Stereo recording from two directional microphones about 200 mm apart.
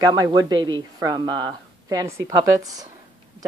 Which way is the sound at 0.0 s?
20° right (ahead or behind).